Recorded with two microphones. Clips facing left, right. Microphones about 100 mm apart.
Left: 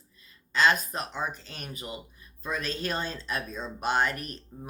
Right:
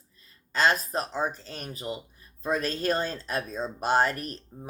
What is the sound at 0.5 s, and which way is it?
Speech, 40° right (ahead or behind).